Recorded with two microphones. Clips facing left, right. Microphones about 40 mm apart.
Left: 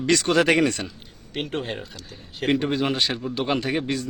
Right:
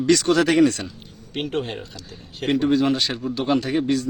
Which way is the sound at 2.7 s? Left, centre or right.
Left.